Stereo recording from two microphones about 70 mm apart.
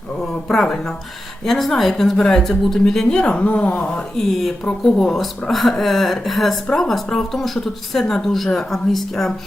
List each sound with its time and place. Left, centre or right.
0.5 s speech: centre
4.3 s speech: centre